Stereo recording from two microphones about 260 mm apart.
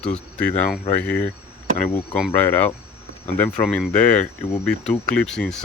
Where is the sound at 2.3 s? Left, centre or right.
Centre.